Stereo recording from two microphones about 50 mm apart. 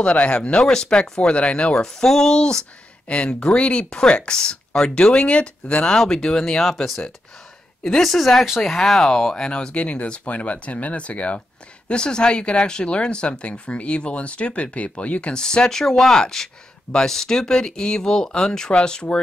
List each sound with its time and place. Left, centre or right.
0.0 s speech: left
1.8 s speech: centre
6.6 s speech: centre; by 15.4 s left
15.4 s speech: centre